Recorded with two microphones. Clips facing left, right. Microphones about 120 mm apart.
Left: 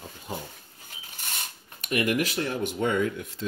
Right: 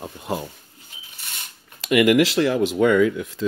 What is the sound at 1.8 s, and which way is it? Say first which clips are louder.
Speech: right 10 dB; 90° right.